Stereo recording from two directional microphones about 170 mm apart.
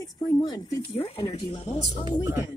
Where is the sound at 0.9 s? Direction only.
35° left (ahead or behind).